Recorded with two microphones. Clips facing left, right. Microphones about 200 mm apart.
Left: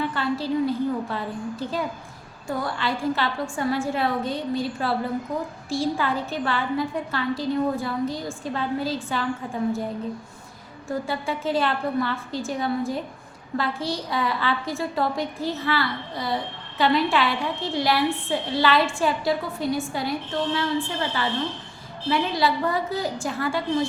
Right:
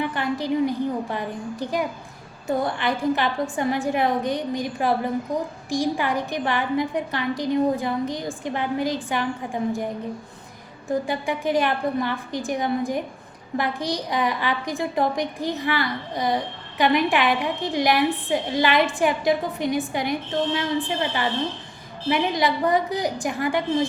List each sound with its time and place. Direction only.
0.0 s a woman's voice: 15° right (ahead or behind)
10.8 s a woman's voice: 15° right (ahead or behind)